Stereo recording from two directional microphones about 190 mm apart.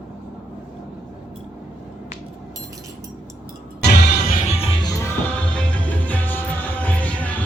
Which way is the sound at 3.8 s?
60° left (ahead or behind).